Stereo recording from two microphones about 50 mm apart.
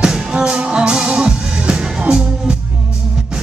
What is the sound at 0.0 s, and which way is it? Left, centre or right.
Music, centre.